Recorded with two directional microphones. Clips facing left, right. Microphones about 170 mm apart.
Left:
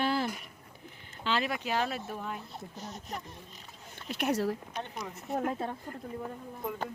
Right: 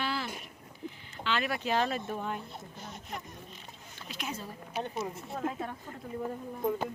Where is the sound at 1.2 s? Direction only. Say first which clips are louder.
Left 1 dB; 35° left (ahead or behind).